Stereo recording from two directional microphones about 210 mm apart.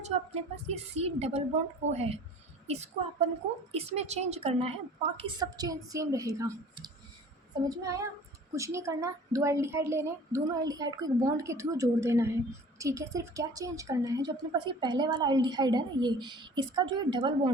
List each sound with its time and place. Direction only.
0.0 s a woman's voice: 30° right (ahead or behind)